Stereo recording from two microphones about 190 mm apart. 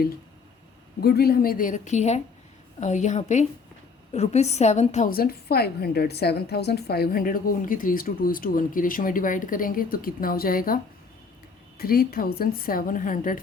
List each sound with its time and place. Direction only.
1.0 s a woman's voice: 55° left (ahead or behind)
11.8 s a woman's voice: 50° left (ahead or behind)